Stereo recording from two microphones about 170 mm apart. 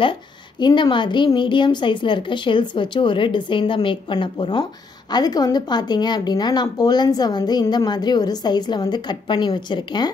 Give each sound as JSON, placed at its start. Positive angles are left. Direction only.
{"t": 0.0, "sound": "speech", "side_deg": 30}